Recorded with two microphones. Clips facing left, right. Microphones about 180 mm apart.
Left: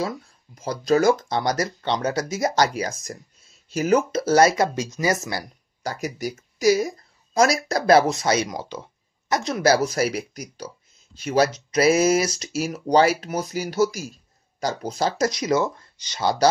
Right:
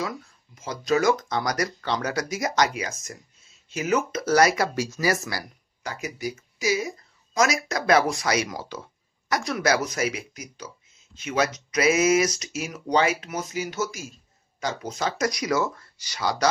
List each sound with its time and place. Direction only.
0.6 s speech: 35° left (ahead or behind)
5.8 s speech: 35° left (ahead or behind)